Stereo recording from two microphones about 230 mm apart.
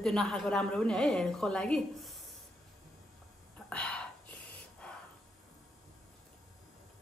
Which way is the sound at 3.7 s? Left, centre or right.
Centre.